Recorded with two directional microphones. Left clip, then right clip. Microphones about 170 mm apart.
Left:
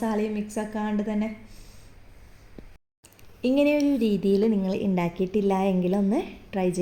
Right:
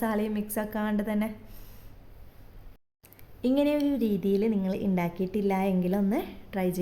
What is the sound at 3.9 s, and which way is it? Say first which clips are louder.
Speech: left 4 dB; 10° right (ahead or behind).